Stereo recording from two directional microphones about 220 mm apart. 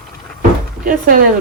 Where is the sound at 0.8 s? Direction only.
40° right (ahead or behind).